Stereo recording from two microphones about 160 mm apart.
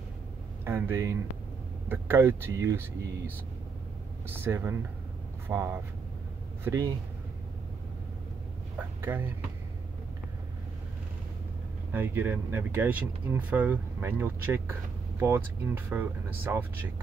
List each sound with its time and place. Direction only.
0.7 s speech: 15° right (ahead or behind)
9.0 s speech: 15° right (ahead or behind)
11.9 s speech: 15° right (ahead or behind)